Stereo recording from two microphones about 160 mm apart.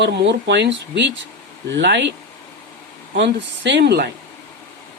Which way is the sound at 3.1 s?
90° right.